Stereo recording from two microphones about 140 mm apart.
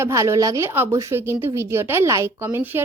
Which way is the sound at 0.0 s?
20° right (ahead or behind).